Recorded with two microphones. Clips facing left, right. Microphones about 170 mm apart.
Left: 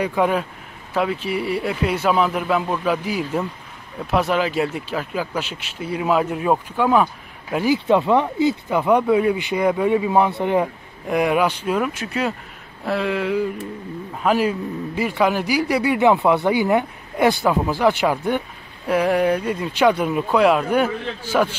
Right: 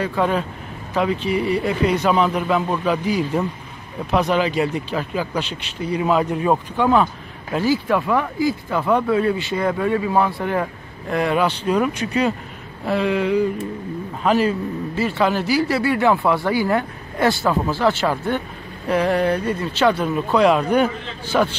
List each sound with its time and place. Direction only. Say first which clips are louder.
0.0 s speech: left 1 dB; 10° left (ahead or behind)